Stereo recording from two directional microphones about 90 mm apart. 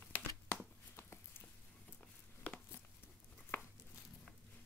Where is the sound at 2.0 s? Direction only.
15° left (ahead or behind).